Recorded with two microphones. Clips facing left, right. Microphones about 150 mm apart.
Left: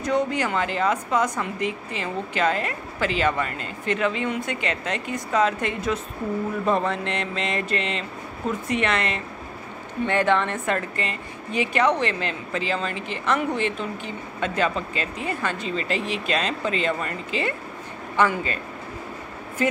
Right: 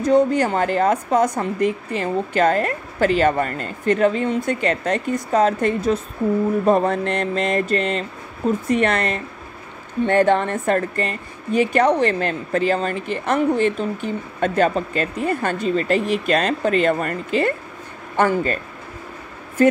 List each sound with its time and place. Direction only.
0.0 s a woman's voice: 35° right (ahead or behind)